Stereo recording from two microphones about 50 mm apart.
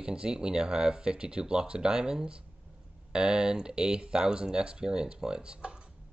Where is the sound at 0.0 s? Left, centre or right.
Centre.